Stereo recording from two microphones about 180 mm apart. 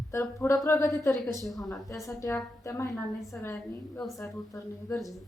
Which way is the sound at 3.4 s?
15° left (ahead or behind).